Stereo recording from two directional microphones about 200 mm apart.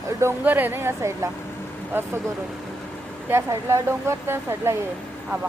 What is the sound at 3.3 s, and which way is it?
A woman's voice, 15° right (ahead or behind).